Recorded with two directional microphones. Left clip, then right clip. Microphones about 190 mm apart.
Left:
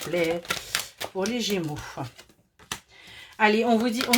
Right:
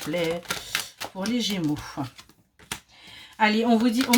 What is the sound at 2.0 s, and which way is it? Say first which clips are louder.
Speech: right 2 dB; 30° left (ahead or behind).